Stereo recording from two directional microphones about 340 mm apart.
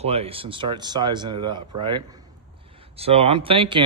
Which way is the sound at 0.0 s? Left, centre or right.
Centre.